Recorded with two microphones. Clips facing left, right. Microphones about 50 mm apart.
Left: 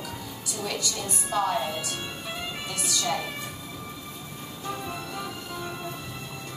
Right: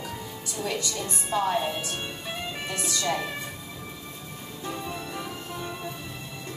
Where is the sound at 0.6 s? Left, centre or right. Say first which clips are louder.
Right 1 dB; right.